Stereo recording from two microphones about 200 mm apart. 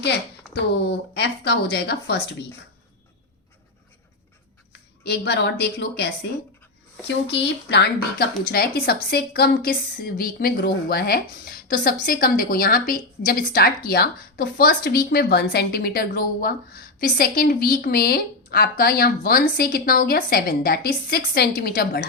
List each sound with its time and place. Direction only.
0.5 s speech: 55° left (ahead or behind)
5.0 s speech: 60° left (ahead or behind)
7.3 s a woman's voice: 60° left (ahead or behind)